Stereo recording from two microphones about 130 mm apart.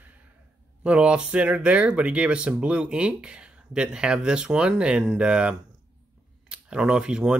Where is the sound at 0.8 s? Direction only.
10° right (ahead or behind).